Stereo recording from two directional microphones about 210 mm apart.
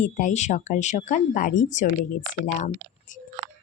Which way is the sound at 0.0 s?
35° left (ahead or behind).